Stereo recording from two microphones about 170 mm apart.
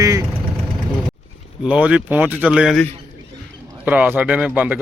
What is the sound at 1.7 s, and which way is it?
Speech, 10° right (ahead or behind).